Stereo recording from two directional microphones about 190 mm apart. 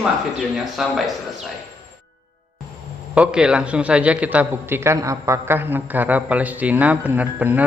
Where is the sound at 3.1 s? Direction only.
5° right (ahead or behind).